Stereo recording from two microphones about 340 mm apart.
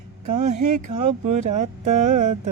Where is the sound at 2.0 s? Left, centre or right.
Right.